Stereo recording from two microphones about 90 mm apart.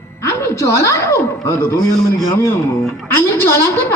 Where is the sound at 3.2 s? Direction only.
25° left (ahead or behind).